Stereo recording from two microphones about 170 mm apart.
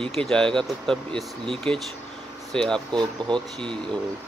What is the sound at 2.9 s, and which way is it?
Speech, 25° right (ahead or behind).